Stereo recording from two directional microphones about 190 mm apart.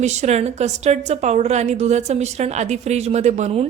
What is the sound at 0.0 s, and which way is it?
A woman's voice, 35° right (ahead or behind).